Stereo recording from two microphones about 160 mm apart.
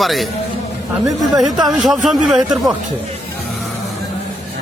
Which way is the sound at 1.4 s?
Centre (ahead or behind).